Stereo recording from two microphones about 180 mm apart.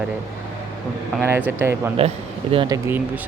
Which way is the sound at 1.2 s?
10° right (ahead or behind).